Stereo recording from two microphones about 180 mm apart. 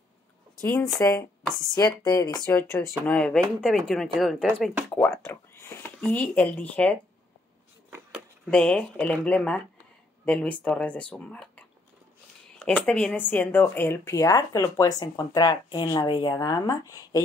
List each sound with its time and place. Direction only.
0.7 s speech: 20° left (ahead or behind); by 4.7 s centre (ahead or behind)
4.9 s speech: 10° left (ahead or behind)
8.5 s speech: 5° left (ahead or behind)